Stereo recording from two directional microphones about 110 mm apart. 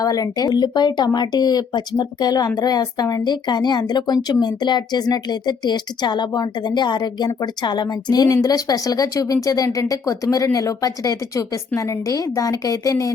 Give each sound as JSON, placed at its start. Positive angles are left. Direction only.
{"t": 0.0, "sound": "speech", "side_deg": 35}